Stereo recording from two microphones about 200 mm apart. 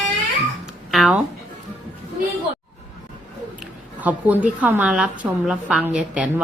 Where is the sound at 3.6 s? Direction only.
5° right (ahead or behind).